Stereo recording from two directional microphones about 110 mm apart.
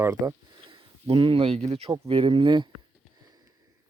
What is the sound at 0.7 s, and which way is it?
Speech, 55° right (ahead or behind).